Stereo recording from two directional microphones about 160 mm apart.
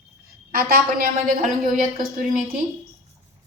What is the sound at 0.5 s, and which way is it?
Speech, 70° right (ahead or behind).